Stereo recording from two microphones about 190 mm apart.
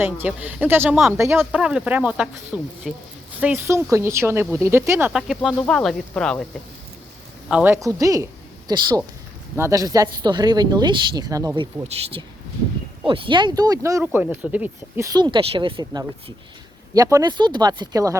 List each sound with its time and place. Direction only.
0.0 s speech: 10° right (ahead or behind)
7.4 s a woman's voice: 10° right (ahead or behind)
13.1 s speech: 25° right (ahead or behind)